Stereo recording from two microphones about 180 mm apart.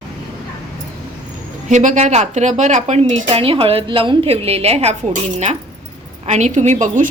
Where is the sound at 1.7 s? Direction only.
45° right (ahead or behind).